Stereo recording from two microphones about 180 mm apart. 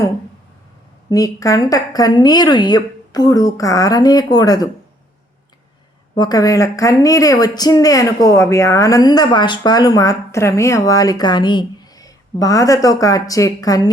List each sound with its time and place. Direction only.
1.1 s speech: 20° left (ahead or behind)
6.1 s speech: 20° left (ahead or behind)